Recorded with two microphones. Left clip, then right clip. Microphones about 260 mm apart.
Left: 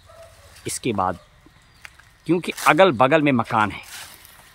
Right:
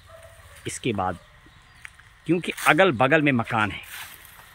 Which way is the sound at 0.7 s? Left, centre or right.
Centre.